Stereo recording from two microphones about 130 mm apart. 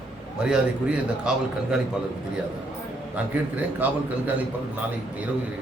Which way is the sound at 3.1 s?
15° right (ahead or behind).